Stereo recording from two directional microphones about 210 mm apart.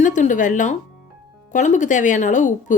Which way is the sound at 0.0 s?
35° left (ahead or behind).